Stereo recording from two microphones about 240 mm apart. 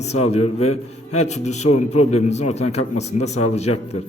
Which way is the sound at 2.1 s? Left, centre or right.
Left.